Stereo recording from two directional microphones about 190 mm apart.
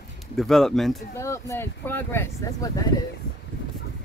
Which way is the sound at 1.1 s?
15° left (ahead or behind).